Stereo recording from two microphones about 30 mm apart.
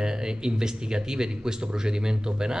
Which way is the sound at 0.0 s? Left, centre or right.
Right.